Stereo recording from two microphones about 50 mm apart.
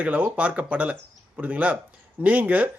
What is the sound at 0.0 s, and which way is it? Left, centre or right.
Speech, right.